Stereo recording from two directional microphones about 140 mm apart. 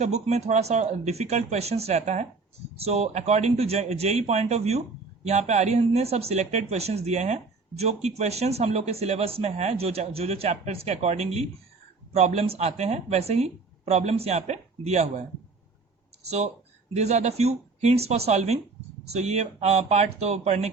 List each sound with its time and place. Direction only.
0.0 s speech: 50° right (ahead or behind)
16.9 s speech: 50° right (ahead or behind)